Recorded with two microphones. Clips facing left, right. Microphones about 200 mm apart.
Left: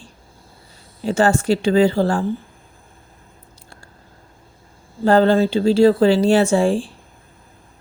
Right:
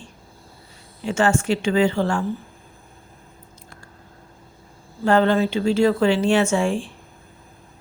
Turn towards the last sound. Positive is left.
turn(degrees=35)  # may be behind; listen again after turning